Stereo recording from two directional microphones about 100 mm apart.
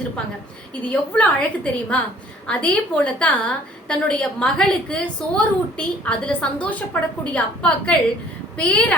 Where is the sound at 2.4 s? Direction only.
10° left (ahead or behind).